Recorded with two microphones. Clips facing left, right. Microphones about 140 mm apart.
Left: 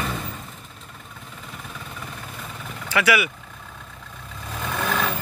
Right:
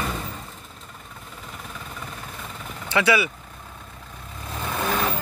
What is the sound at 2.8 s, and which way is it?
Speech, 25° right (ahead or behind).